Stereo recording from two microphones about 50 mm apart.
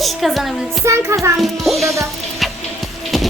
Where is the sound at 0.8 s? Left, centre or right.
Right.